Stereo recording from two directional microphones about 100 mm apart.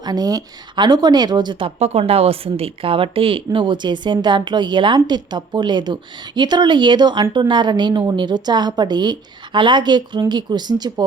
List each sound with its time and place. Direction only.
0.0 s speech: 40° right (ahead or behind)
1.6 s speech: 90° right; by 11.0 s 45° right (ahead or behind)